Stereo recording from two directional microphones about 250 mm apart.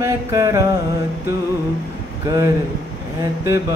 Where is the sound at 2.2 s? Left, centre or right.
Centre.